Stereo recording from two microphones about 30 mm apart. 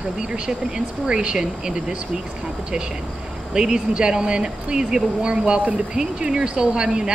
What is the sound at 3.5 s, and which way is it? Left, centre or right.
Speech, right.